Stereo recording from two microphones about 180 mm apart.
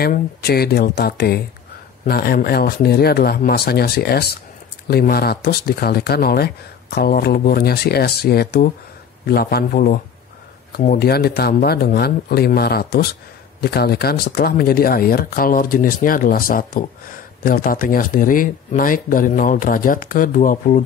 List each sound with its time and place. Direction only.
0.0 s speech: 60° left (ahead or behind)